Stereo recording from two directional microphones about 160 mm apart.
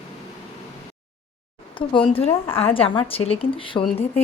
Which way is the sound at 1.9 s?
35° left (ahead or behind).